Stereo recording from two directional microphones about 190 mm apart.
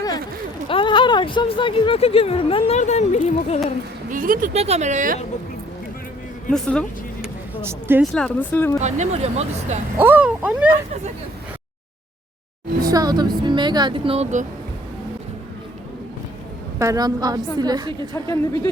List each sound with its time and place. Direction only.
0.7 s speech: 25° left (ahead or behind)
4.1 s speech: 45° right (ahead or behind)
6.5 s speech: 5° left (ahead or behind)
7.6 s speech: 10° right (ahead or behind)
8.1 s speech: 5° left (ahead or behind)
8.8 s speech: 35° right (ahead or behind)
10.0 s speech: 10° right (ahead or behind)
12.8 s a woman's voice: 20° right (ahead or behind); by 14.4 s 35° right (ahead or behind)
16.7 s a woman's voice: 15° right (ahead or behind)
18.1 s speech: 15° left (ahead or behind)